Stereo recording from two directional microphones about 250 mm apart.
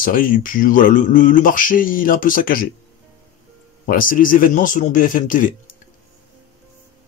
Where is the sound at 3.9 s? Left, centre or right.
Left.